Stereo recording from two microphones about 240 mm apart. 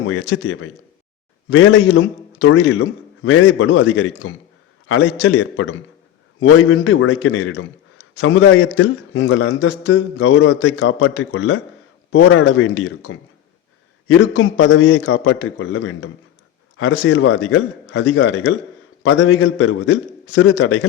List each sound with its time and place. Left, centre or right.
0.0 s a man's voice: left